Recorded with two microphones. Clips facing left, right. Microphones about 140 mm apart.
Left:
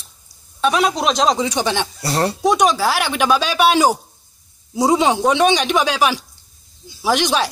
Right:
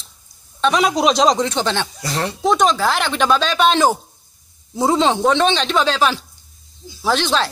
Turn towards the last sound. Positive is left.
turn(degrees=15)  # may be behind; listen again after turning